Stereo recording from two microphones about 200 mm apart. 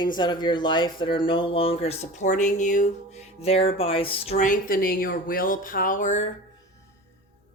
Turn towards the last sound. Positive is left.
turn(degrees=35)  # may be behind; listen again after turning